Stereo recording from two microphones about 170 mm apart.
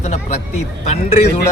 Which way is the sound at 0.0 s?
45° left (ahead or behind).